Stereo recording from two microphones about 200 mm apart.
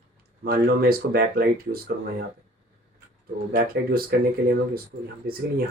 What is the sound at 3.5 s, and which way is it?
Speech, 50° right (ahead or behind).